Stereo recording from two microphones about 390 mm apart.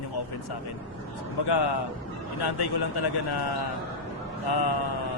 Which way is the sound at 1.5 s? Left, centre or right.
Left.